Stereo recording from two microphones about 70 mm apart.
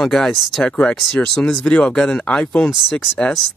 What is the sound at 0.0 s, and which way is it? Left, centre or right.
Speech, centre.